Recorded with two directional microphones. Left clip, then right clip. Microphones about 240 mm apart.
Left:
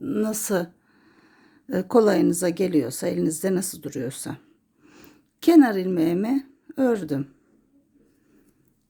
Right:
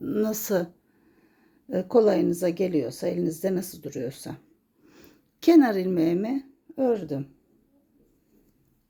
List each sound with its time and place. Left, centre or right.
0.0 s a woman's voice: centre